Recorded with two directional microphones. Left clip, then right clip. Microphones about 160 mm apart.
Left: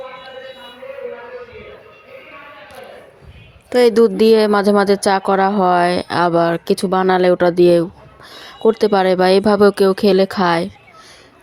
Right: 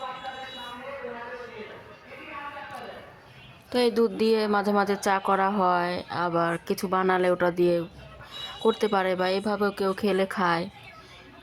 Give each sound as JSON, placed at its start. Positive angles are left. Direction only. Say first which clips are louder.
{"t": 3.7, "sound": "a woman's voice", "louder": "left 12 dB", "side_deg": 35}
{"t": 5.8, "sound": "speech", "louder": "left 13 dB", "side_deg": 45}
{"t": 6.3, "sound": "speech", "louder": "left 11 dB", "side_deg": 25}